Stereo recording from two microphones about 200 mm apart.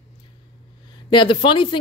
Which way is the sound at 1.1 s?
25° left (ahead or behind).